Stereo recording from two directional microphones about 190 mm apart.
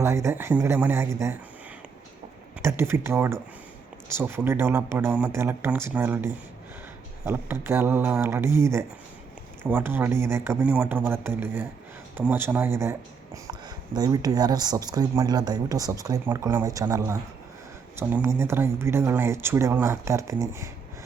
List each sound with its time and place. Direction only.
0.0 s speech: 15° right (ahead or behind)
2.6 s speech: 15° right (ahead or behind)